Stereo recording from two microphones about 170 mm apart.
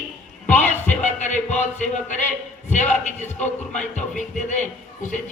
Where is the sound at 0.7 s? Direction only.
45° left (ahead or behind).